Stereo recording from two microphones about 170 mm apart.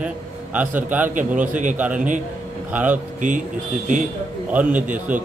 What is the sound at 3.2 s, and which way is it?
Speech, 45° right (ahead or behind).